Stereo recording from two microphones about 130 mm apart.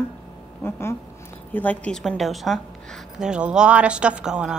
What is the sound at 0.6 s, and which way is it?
A woman's voice, 20° left (ahead or behind).